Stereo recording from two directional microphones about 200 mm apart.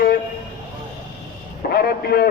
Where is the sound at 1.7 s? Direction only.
50° left (ahead or behind).